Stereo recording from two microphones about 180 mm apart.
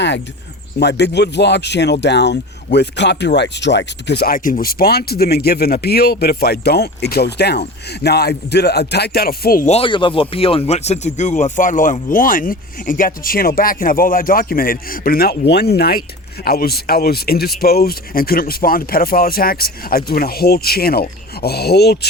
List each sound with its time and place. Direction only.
0.8 s speech: 70° left (ahead or behind); by 9.6 s 55° left (ahead or behind)
9.6 s speech: 30° left (ahead or behind); by 21.9 s 65° left (ahead or behind)